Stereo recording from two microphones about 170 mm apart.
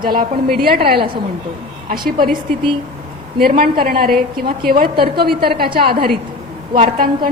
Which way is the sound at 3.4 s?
60° right (ahead or behind).